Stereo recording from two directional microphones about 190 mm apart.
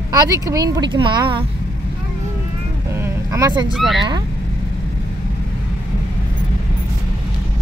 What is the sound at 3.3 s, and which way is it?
Speech, 20° right (ahead or behind).